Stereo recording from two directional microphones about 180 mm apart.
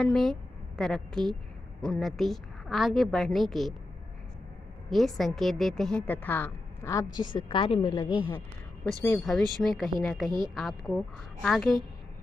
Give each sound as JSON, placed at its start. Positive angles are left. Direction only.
{"t": 0.0, "sound": "a woman's voice", "side_deg": 0}
{"t": 4.8, "sound": "a woman's voice", "side_deg": 0}
{"t": 7.2, "sound": "a woman's voice", "side_deg": 25}
{"t": 9.0, "sound": "a woman's voice", "side_deg": 5}